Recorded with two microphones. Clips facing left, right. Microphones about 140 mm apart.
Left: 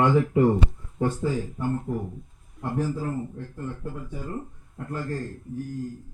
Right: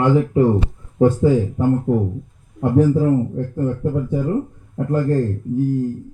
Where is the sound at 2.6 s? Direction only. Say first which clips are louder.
Right 13 dB; 75° right (ahead or behind).